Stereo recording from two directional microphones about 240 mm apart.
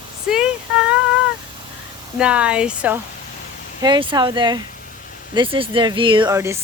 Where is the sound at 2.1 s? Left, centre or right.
Centre.